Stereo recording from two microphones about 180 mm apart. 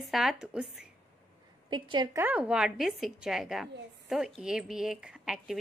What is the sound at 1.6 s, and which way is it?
Speech, 25° right (ahead or behind).